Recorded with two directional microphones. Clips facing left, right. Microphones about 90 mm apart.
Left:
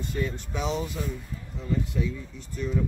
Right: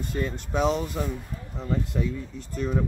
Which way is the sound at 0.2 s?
50° right (ahead or behind).